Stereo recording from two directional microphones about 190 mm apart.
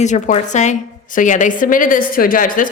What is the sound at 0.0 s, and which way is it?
Speech, 40° left (ahead or behind).